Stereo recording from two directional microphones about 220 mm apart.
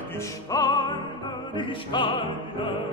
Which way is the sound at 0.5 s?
20° left (ahead or behind).